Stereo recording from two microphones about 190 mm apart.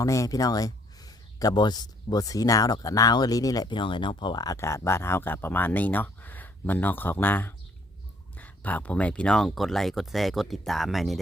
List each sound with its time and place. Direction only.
0.0 s speech: 15° left (ahead or behind); by 11.2 s centre (ahead or behind)